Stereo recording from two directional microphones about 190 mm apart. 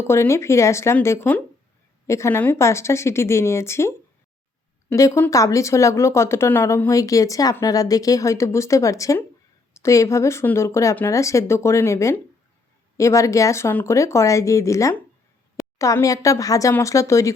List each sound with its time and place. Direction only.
0.1 s speech: 15° left (ahead or behind)